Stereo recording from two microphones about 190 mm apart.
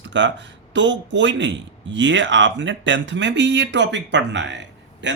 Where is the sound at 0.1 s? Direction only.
70° right (ahead or behind).